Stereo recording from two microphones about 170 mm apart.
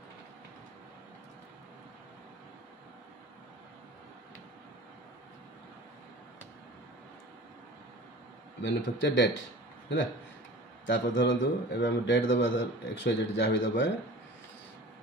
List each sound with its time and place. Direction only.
8.5 s a man's voice: 90° left
10.9 s a man's voice: 90° left